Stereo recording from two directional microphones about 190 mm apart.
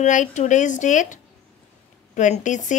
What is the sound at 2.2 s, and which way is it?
Speech, 40° left (ahead or behind).